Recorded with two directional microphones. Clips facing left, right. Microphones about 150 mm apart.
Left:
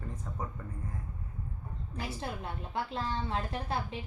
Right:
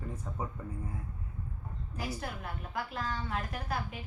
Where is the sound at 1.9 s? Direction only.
25° left (ahead or behind).